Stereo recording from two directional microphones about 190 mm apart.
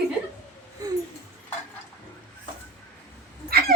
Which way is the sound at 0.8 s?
20° right (ahead or behind).